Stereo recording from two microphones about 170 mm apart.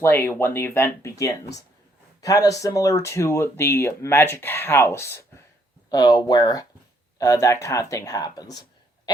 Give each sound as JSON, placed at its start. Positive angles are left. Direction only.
{"t": 0.0, "sound": "speech", "side_deg": 10}
{"t": 2.2, "sound": "speech", "side_deg": 20}